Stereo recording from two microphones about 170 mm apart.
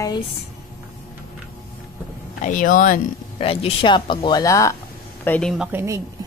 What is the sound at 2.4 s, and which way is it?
Speech, 50° left (ahead or behind).